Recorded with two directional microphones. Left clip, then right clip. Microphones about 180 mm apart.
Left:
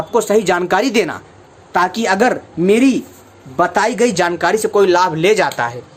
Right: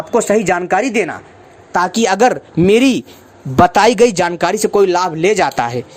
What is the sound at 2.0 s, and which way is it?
Speech, 55° right (ahead or behind).